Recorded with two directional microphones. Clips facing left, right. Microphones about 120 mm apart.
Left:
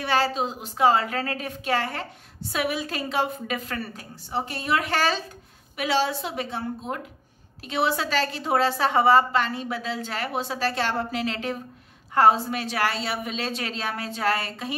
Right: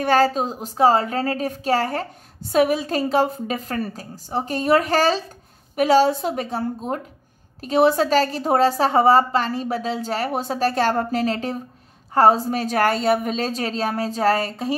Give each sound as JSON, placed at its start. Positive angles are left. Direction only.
{"t": 0.0, "sound": "a woman's voice", "side_deg": -45}